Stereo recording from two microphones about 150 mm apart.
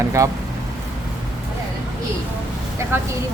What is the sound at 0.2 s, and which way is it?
Speech, 20° right (ahead or behind).